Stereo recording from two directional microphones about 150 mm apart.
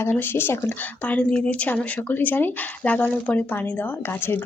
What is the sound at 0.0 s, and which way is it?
Speech, 15° left (ahead or behind).